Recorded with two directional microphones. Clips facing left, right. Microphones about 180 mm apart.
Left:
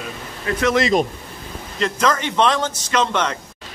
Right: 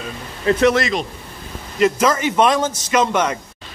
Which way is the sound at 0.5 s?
25° right (ahead or behind).